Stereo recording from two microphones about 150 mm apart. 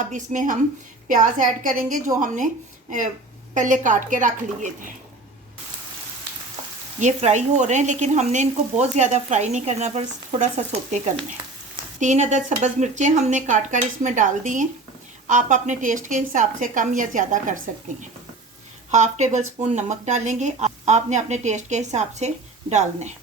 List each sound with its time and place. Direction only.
0.0 s a woman's voice: 55° right (ahead or behind)
3.5 s a woman's voice: 60° right (ahead or behind)
7.0 s a woman's voice: 50° right (ahead or behind)